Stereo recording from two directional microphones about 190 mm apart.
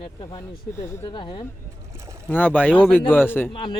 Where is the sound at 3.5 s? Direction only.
25° left (ahead or behind).